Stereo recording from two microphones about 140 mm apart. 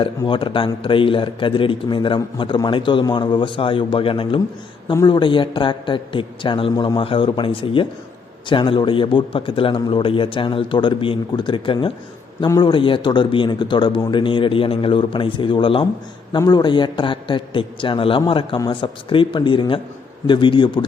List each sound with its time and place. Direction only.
0.3 s a man's voice: 35° left (ahead or behind)